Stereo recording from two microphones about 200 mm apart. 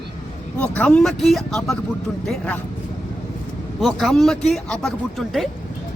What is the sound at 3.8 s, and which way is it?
A man's voice, centre (ahead or behind).